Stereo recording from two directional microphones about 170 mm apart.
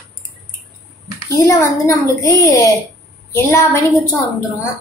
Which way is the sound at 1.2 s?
20° left (ahead or behind).